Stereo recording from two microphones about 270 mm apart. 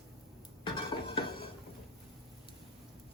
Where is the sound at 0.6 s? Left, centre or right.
Centre.